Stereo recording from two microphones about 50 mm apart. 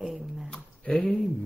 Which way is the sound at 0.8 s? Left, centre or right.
Left.